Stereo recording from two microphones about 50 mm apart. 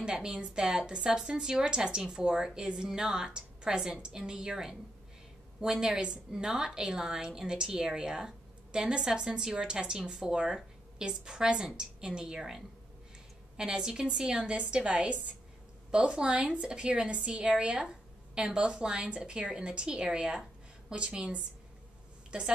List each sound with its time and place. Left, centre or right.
0.0 s a woman's voice: centre